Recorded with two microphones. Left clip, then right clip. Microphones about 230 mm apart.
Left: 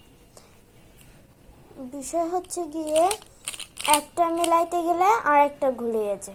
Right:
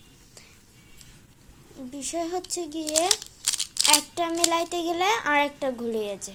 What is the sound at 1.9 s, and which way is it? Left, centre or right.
A child's voice, centre.